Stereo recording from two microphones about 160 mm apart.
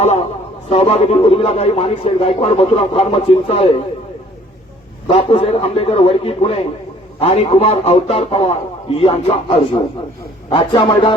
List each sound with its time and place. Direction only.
0.7 s speech: 40° left (ahead or behind)
5.0 s speech: 35° left (ahead or behind)